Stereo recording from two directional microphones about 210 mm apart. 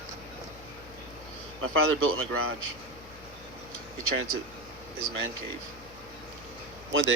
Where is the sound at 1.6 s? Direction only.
75° right (ahead or behind).